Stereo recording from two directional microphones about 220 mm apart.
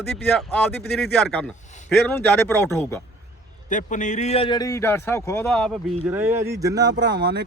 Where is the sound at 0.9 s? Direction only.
Centre (ahead or behind).